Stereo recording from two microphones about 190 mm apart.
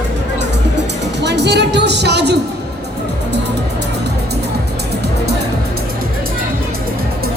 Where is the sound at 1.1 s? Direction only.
65° right (ahead or behind).